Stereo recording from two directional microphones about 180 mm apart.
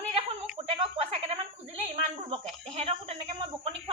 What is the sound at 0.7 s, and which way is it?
Speech, 35° right (ahead or behind).